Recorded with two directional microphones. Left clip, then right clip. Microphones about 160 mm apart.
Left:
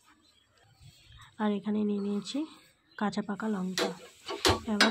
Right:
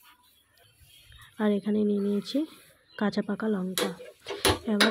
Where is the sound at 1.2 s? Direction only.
15° right (ahead or behind).